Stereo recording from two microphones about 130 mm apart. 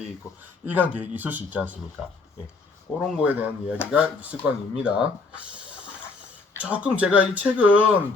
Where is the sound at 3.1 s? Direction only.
10° right (ahead or behind).